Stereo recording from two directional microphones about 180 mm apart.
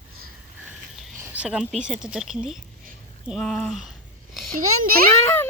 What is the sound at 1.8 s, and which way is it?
Speech, 5° right (ahead or behind).